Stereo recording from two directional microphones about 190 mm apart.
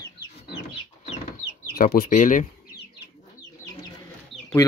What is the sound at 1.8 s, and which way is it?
Speech, 50° left (ahead or behind).